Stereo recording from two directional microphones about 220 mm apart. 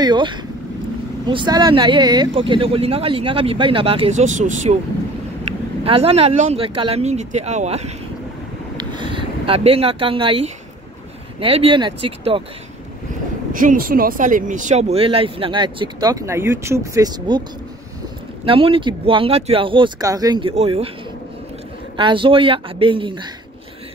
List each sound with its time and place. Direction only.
0.0 s speech: 20° right (ahead or behind)
8.7 s a sound: 20° right (ahead or behind)
11.3 s speech: 25° right (ahead or behind)
13.5 s speech: 40° right (ahead or behind); by 17.4 s 15° right (ahead or behind)
18.4 s speech: 25° right (ahead or behind)
21.9 s speech: 20° right (ahead or behind)